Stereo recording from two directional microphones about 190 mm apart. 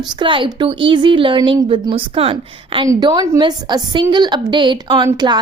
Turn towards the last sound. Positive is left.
turn(degrees=-20)  # may be behind; listen again after turning